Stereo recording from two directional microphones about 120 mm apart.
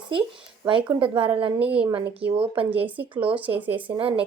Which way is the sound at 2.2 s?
50° right (ahead or behind).